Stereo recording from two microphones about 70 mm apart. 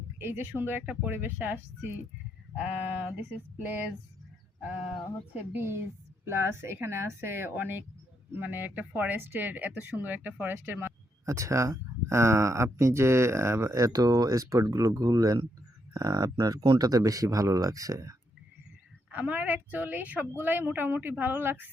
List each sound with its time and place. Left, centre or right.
0.2 s speech: right
2.6 s speech: centre
5.3 s speech: right
5.6 s a woman's voice: right
11.3 s speech: right
19.1 s speech: right